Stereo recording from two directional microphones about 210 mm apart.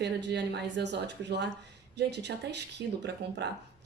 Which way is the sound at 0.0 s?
55° right (ahead or behind).